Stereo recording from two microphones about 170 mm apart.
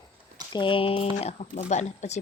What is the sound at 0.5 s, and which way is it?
Speech, 30° left (ahead or behind).